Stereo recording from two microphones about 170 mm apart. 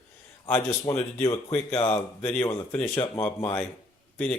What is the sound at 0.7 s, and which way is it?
Speech, 20° left (ahead or behind).